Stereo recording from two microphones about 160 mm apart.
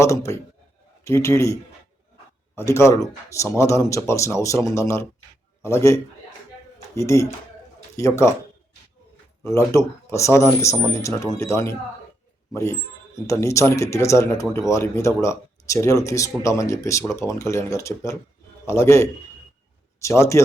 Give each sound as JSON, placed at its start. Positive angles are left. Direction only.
{"t": 0.0, "sound": "speech", "side_deg": 20}
{"t": 2.6, "sound": "speech", "side_deg": 20}
{"t": 9.4, "sound": "speech", "side_deg": 15}
{"t": 13.2, "sound": "speech", "side_deg": 20}